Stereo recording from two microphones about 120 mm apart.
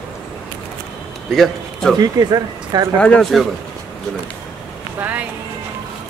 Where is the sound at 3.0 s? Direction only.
5° left (ahead or behind).